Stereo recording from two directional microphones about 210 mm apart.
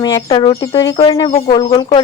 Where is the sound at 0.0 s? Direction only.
20° left (ahead or behind).